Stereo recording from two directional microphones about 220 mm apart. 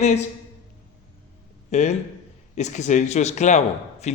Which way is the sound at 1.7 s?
30° left (ahead or behind).